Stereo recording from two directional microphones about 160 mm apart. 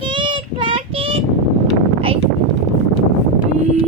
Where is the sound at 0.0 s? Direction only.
30° right (ahead or behind).